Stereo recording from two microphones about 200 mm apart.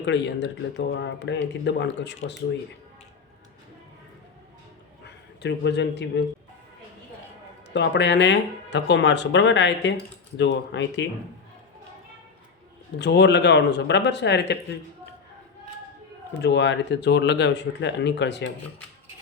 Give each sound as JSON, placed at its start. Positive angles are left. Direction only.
{"t": 0.0, "sound": "speech", "side_deg": 60}
{"t": 5.0, "sound": "a man's voice", "side_deg": 60}
{"t": 7.7, "sound": "speech", "side_deg": 60}
{"t": 13.0, "sound": "speech", "side_deg": 60}
{"t": 16.4, "sound": "speech", "side_deg": 60}